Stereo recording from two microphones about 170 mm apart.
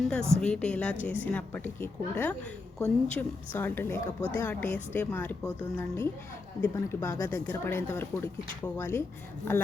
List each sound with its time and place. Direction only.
0.0 s a woman's voice: 5° left (ahead or behind)